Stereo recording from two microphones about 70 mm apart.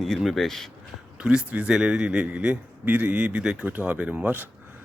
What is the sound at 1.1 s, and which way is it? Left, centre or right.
A man's voice, centre.